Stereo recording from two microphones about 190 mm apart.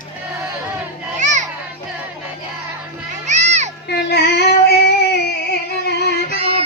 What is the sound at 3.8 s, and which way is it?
Child singing, 60° left (ahead or behind).